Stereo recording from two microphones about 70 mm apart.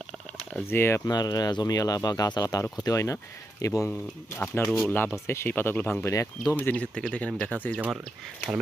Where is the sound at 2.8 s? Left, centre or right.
Left.